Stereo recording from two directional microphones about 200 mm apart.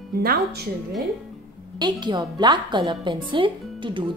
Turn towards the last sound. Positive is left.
turn(degrees=-25)  # may be behind; listen again after turning